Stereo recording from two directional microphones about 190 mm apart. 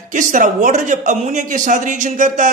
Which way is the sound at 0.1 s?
45° right (ahead or behind).